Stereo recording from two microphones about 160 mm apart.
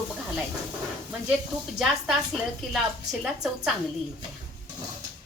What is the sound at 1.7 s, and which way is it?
A woman's voice, centre (ahead or behind).